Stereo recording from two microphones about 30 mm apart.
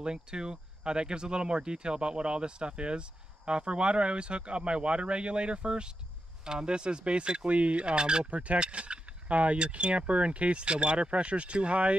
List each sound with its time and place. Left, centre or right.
0.0 s speech: right
7.4 s speech: right
7.8 s speech: right
8.3 s speech: right
8.5 s speech: right